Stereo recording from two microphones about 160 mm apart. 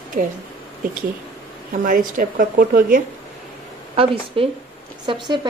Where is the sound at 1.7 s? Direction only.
60° right (ahead or behind).